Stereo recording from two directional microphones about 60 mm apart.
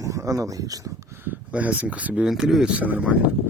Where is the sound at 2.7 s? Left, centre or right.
Right.